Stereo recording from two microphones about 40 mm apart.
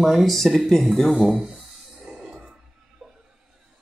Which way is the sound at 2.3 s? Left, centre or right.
Centre.